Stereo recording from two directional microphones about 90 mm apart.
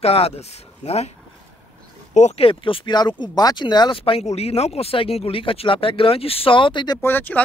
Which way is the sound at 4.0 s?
90° left.